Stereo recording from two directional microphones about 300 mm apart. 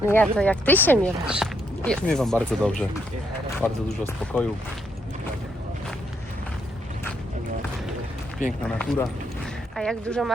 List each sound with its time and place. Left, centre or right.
0.0 s speech: centre
8.4 s speech: centre